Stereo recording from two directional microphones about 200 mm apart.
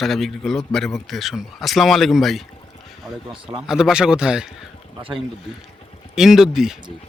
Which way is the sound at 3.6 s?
5° right (ahead or behind).